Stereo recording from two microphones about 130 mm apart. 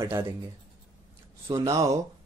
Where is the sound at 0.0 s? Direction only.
20° right (ahead or behind).